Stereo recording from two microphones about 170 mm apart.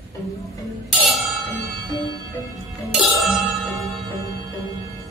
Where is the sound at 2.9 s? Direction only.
Centre (ahead or behind).